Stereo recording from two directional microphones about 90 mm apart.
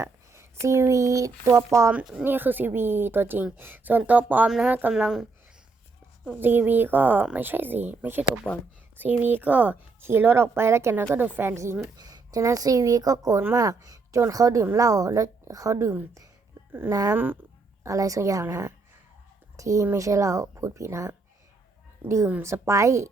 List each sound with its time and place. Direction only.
0.0 s speech: 30° right (ahead or behind)
2.2 s a woman's voice: 20° right (ahead or behind)
4.4 s a woman's voice: 5° right (ahead or behind)
6.2 s a woman's voice: 20° right (ahead or behind)
11.9 s a woman's voice: 45° right (ahead or behind)